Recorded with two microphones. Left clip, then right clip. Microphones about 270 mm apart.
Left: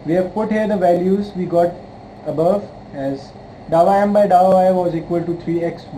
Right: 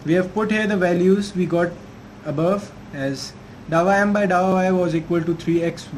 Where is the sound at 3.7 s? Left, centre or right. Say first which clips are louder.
Left 4 dB; right.